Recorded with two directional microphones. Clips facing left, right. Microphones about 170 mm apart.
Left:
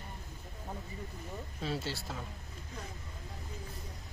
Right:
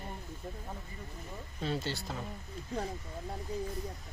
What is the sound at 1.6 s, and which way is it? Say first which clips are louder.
Speech: right 2 dB; centre (ahead or behind).